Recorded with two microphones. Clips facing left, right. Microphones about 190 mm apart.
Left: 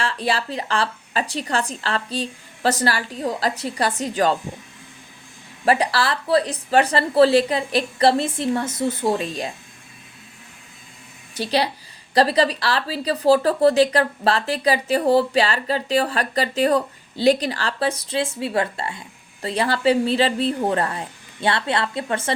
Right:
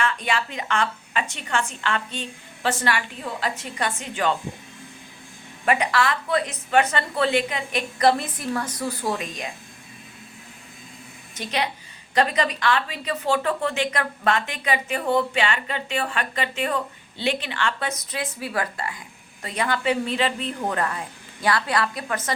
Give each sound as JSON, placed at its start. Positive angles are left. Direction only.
{"t": 0.0, "sound": "speech", "side_deg": 35}
{"t": 5.6, "sound": "speech", "side_deg": 35}
{"t": 11.3, "sound": "a woman's voice", "side_deg": 35}